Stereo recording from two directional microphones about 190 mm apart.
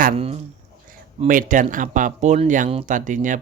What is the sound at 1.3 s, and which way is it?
Speech, 45° right (ahead or behind).